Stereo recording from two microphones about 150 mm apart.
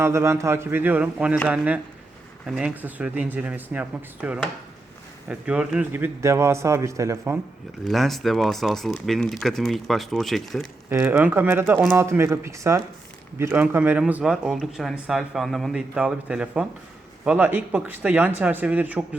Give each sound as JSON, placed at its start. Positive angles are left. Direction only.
{"t": 0.0, "sound": "speech", "side_deg": -20}
{"t": 7.9, "sound": "speech", "side_deg": 0}
{"t": 10.8, "sound": "speech", "side_deg": -15}